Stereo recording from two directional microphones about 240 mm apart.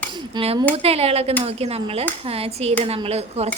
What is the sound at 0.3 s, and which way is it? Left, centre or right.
A woman's voice, right.